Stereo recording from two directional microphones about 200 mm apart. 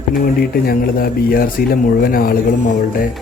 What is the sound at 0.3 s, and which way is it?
Speech, 50° left (ahead or behind).